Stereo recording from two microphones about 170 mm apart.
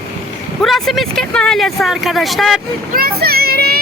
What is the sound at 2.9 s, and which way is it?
Speech, 60° right (ahead or behind).